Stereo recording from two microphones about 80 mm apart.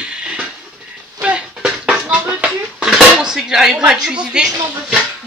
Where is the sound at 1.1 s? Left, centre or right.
Centre.